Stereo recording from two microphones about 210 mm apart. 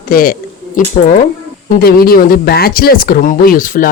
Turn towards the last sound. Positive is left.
turn(degrees=40)  # may be behind; listen again after turning